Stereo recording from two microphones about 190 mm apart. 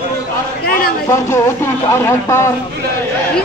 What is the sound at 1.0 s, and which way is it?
Speech, 15° left (ahead or behind).